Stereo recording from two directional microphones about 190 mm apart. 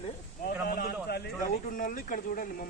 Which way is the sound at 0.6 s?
55° left (ahead or behind).